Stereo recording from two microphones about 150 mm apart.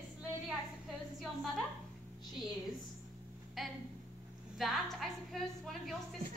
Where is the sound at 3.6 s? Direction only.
Centre (ahead or behind).